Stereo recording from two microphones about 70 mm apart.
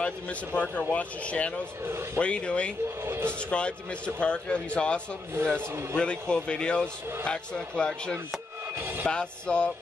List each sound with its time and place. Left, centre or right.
0.6 s a man's voice: centre
3.1 s speech: right
3.3 s a man's voice: centre
5.3 s speech: right
5.9 s a man's voice: centre
8.7 s music: right
9.0 s a man's voice: centre